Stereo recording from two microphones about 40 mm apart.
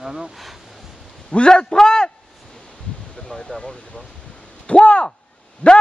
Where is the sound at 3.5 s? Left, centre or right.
Left.